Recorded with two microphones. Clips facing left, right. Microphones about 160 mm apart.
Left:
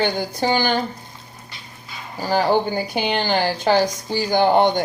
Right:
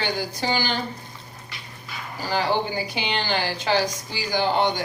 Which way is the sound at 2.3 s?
50° left (ahead or behind).